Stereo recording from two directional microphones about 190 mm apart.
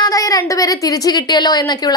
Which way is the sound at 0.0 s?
20° left (ahead or behind).